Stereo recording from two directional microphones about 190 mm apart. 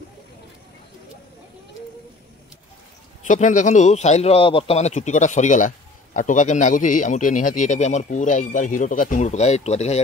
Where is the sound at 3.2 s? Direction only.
40° left (ahead or behind).